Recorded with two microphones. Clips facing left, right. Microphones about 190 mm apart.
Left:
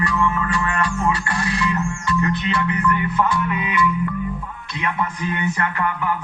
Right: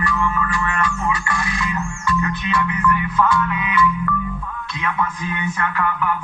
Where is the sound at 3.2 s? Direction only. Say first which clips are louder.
Right 3 dB; 20° left (ahead or behind).